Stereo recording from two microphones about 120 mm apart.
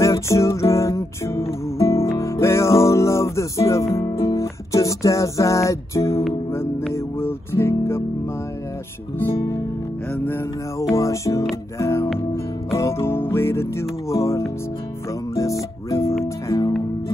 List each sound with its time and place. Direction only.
0.0 s music: 25° left (ahead or behind)
10.1 s music: 20° left (ahead or behind)